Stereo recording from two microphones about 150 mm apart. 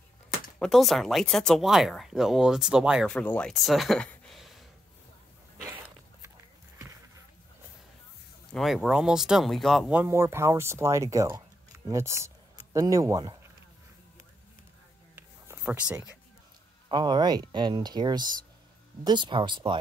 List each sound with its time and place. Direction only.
0.6 s speech: centre (ahead or behind)
3.1 s speech: 10° left (ahead or behind)
8.5 s speech: centre (ahead or behind)
9.9 s speech: 15° right (ahead or behind)
15.1 s a sound: 15° right (ahead or behind)
16.9 s speech: 30° right (ahead or behind)